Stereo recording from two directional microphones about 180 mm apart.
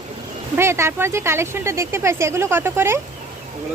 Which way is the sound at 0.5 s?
15° right (ahead or behind).